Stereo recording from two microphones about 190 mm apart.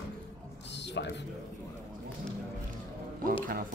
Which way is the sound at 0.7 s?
65° left (ahead or behind).